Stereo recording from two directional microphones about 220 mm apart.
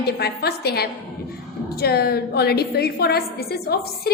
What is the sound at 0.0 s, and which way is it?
A woman's voice, 45° left (ahead or behind).